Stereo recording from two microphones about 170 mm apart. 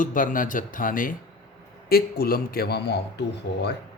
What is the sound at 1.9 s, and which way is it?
A man's voice, 65° left (ahead or behind).